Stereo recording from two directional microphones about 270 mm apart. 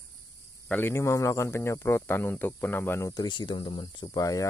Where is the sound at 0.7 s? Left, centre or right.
Centre.